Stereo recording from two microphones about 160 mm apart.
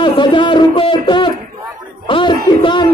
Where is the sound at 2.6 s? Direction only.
30° left (ahead or behind).